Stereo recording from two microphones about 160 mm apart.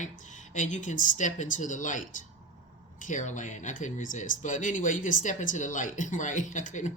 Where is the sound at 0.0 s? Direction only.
50° left (ahead or behind).